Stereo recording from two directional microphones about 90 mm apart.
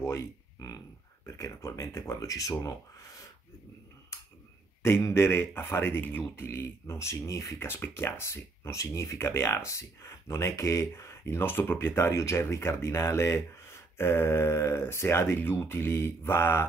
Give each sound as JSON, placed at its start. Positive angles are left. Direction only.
{"t": 0.6, "sound": "speech", "side_deg": 45}
{"t": 4.8, "sound": "speech", "side_deg": 25}